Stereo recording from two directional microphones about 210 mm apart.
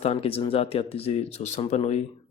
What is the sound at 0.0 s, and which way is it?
Speech, 30° left (ahead or behind).